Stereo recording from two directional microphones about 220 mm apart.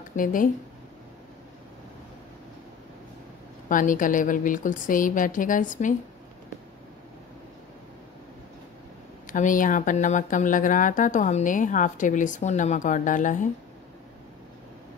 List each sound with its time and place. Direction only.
0.1 s speech: 40° left (ahead or behind)
3.6 s speech: 35° left (ahead or behind)
9.3 s speech: 35° left (ahead or behind)